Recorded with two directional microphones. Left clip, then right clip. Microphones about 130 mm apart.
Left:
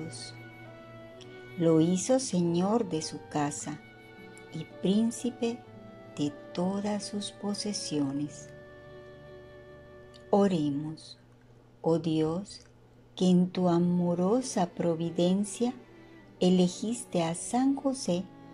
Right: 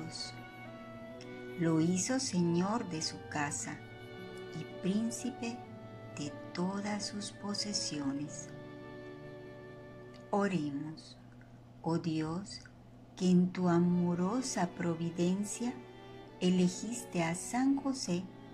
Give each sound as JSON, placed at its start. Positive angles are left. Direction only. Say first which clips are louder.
{"t": 1.6, "sound": "speech", "louder": "left 7 dB", "side_deg": 40}
{"t": 4.6, "sound": "speech", "louder": "left 8 dB", "side_deg": 35}
{"t": 10.3, "sound": "speech", "louder": "left 8 dB", "side_deg": 40}
{"t": 11.8, "sound": "speech", "louder": "left 8 dB", "side_deg": 40}